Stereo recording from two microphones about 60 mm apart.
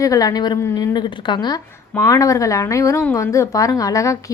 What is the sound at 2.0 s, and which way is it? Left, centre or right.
A woman's voice, left.